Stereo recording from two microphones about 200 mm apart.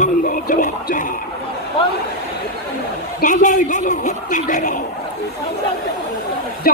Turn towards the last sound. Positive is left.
turn(degrees=45)  # may be behind; listen again after turning